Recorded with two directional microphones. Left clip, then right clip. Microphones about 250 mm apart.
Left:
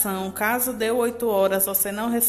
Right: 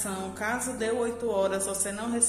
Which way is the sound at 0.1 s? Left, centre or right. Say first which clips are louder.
Left 8 dB; left.